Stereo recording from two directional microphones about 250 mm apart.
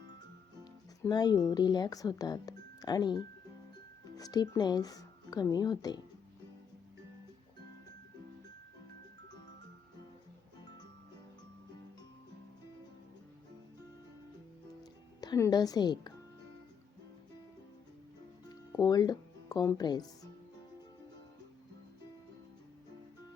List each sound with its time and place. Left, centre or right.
0.6 s speech: centre
15.2 s a woman's voice: centre
18.4 s music: centre